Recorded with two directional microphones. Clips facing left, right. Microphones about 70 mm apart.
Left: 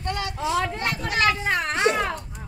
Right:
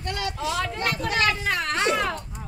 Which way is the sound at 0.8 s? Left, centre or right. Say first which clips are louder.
Left 1 dB; centre.